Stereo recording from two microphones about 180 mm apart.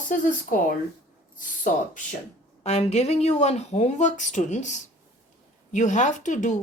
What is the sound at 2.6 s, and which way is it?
Speech, 35° left (ahead or behind).